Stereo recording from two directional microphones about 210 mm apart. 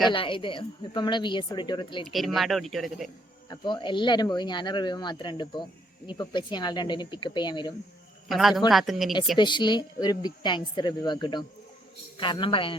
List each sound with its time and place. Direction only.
0.1 s speech: 25° left (ahead or behind)
2.0 s speech: centre (ahead or behind)
3.5 s speech: 20° left (ahead or behind)
8.3 s speech: centre (ahead or behind)
9.4 s speech: 20° left (ahead or behind)